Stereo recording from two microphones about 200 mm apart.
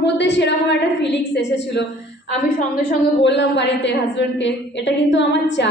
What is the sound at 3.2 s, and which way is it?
A woman's voice, 60° left (ahead or behind).